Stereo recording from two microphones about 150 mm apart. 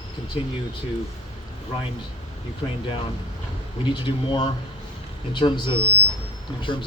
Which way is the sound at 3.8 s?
30° left (ahead or behind).